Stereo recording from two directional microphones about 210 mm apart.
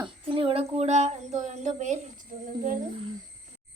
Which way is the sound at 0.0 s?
25° right (ahead or behind).